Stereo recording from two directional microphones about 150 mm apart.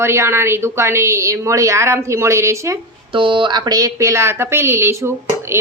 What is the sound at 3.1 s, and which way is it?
Speech, 35° right (ahead or behind).